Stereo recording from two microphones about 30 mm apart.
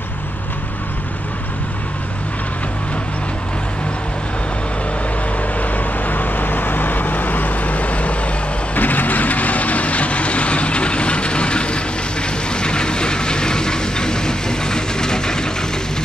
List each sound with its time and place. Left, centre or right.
5.6 s vehicle: left
8.7 s vehicle: left